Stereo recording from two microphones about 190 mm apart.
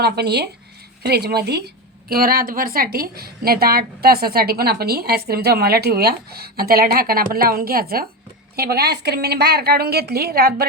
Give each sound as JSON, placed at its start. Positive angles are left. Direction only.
{"t": 0.0, "sound": "a woman's voice", "side_deg": -60}